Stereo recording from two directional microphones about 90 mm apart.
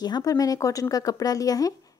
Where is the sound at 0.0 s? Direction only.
45° left (ahead or behind).